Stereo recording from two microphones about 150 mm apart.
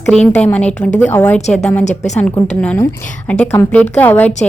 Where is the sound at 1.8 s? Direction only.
50° left (ahead or behind).